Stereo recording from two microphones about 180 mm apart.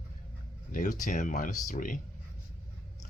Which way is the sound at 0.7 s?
45° left (ahead or behind).